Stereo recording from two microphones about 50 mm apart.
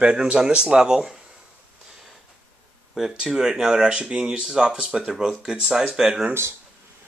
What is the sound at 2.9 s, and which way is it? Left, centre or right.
Speech, centre.